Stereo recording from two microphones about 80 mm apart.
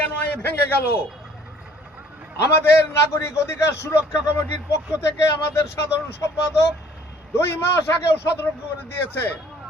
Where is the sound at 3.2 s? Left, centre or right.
Left.